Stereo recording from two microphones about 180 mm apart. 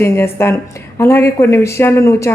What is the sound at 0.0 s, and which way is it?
A woman's voice, 15° left (ahead or behind).